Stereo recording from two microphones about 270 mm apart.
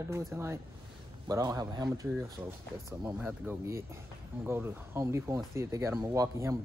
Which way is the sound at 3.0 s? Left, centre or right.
Centre.